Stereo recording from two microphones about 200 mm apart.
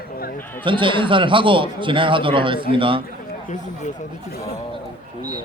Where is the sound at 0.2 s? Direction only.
45° left (ahead or behind).